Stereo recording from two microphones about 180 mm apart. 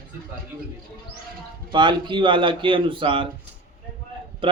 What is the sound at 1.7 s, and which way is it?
Speech, 25° right (ahead or behind).